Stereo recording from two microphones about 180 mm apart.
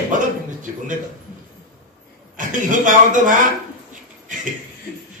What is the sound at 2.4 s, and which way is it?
A man's voice, 45° right (ahead or behind).